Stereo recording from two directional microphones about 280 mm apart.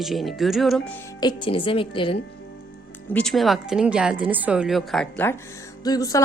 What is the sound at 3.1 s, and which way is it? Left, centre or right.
A woman's voice, centre.